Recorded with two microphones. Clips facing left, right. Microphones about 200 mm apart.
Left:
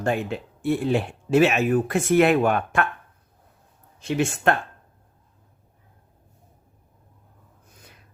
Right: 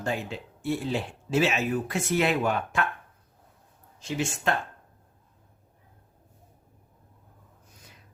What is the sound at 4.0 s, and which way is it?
Speech, 60° left (ahead or behind).